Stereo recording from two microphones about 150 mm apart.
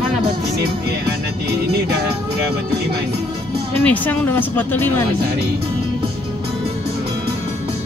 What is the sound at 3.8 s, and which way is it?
A woman's voice, 10° left (ahead or behind).